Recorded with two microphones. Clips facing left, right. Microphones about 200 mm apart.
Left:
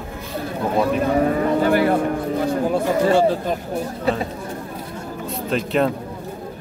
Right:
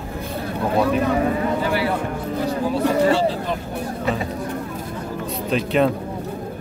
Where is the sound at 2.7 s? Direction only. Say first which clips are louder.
Right 1 dB; 50° left (ahead or behind).